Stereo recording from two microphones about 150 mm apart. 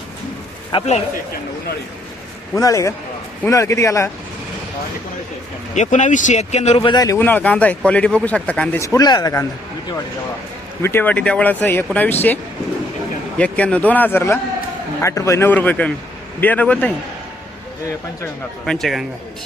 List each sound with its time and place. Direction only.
0.7 s a man's voice: 40° left (ahead or behind)
2.6 s speech: 20° left (ahead or behind)
5.7 s speech: 55° left (ahead or behind); by 7.2 s 25° left (ahead or behind)
7.2 s speech: 10° left (ahead or behind)
8.8 s speech: 25° left (ahead or behind)
10.8 s speech: 15° left (ahead or behind)
13.4 s speech: 10° left (ahead or behind)
18.6 s speech: centre (ahead or behind)